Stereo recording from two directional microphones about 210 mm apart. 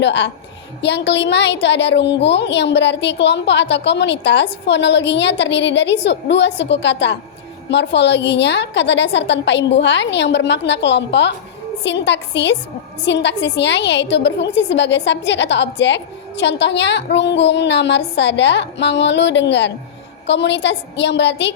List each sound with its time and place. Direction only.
0.0 s a woman's voice: 55° left (ahead or behind)